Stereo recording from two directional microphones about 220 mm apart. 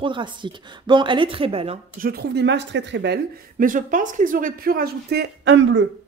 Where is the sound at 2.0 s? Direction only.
45° right (ahead or behind).